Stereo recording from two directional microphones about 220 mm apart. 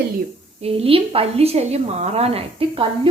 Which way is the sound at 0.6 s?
25° right (ahead or behind).